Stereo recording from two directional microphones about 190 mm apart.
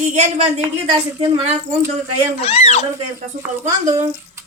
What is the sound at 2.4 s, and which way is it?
Speech, 35° left (ahead or behind).